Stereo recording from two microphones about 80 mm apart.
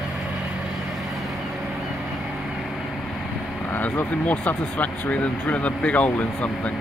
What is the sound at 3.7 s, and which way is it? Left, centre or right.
Speech, left.